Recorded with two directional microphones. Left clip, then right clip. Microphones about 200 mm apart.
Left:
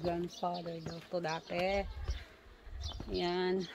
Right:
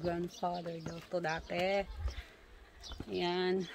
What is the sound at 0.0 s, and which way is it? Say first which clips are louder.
Speech: even; 15° right (ahead or behind).